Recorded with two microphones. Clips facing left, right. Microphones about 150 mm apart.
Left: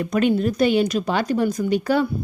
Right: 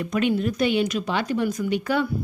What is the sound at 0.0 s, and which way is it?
A woman's voice, 40° left (ahead or behind).